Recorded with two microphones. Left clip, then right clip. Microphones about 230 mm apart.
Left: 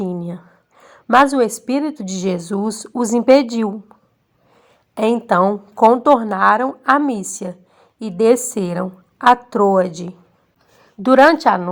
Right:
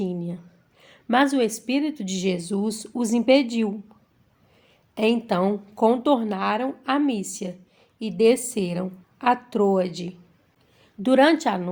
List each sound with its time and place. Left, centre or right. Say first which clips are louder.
0.0 s a sound: left 5 dB; centre
1.1 s a woman's voice: left 8 dB; centre
4.9 s a woman's voice: left 7 dB; centre
11.2 s a woman's voice: left 8 dB; centre